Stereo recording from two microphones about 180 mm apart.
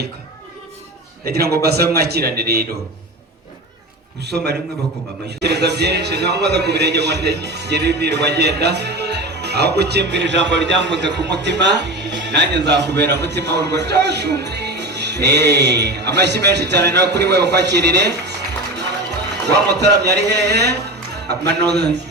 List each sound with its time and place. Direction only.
1.2 s a man's voice: 60° right (ahead or behind)
4.2 s a man's voice: 65° right (ahead or behind)
19.5 s a man's voice: 70° right (ahead or behind)